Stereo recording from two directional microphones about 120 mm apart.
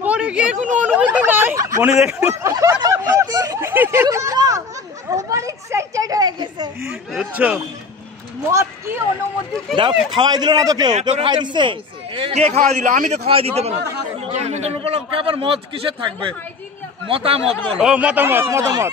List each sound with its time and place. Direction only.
0.0 s a sound: 10° right (ahead or behind)
0.7 s speech: 15° right (ahead or behind)
2.0 s speech: 10° right (ahead or behind)
2.2 s snicker: 25° right (ahead or behind)
3.6 s a sound: 20° right (ahead or behind); by 6.7 s 35° right (ahead or behind)
6.9 s speech: 5° right (ahead or behind)
8.5 s speech: 20° right (ahead or behind)
9.8 s a man's voice: 40° right (ahead or behind)
12.4 s a man's voice: 70° right (ahead or behind)
13.3 s a man's voice: 55° right (ahead or behind)
14.3 s a sound: 65° right (ahead or behind)
14.8 s a man's voice: 55° right (ahead or behind)
17.7 s speech: 10° right (ahead or behind); by 18.9 s 25° right (ahead or behind)